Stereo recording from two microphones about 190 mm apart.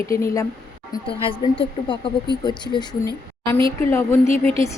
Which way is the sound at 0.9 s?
25° left (ahead or behind).